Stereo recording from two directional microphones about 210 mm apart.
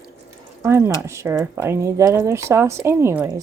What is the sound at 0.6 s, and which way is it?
Speech, 10° right (ahead or behind).